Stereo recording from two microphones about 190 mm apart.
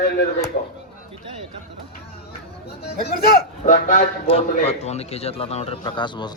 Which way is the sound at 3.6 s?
45° left (ahead or behind).